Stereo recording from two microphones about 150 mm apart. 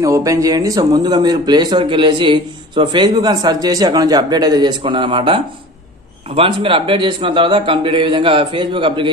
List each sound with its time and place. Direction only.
0.0 s a man's voice: 20° right (ahead or behind)